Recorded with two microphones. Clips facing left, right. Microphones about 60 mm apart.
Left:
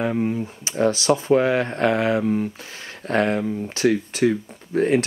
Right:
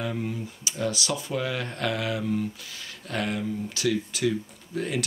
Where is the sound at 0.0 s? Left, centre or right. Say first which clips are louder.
Left 8 dB; left.